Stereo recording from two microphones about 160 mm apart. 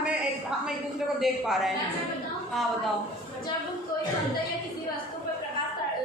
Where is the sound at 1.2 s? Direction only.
Centre (ahead or behind).